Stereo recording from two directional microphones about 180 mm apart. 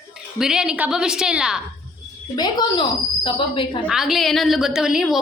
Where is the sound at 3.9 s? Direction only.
Centre (ahead or behind).